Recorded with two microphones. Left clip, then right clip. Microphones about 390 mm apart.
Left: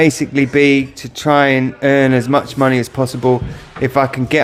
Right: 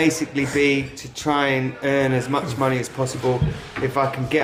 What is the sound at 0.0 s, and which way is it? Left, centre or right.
Speech, left.